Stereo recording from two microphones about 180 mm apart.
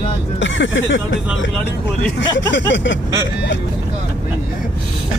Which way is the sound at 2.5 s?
85° left.